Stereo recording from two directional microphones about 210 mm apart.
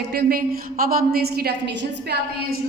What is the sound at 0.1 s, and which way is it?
A woman's voice, 45° right (ahead or behind).